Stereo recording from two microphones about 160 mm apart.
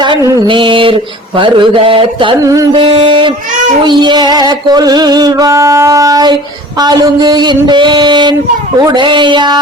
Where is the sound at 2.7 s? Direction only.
35° right (ahead or behind).